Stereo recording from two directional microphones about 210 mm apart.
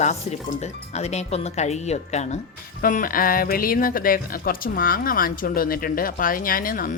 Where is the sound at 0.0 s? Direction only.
35° left (ahead or behind).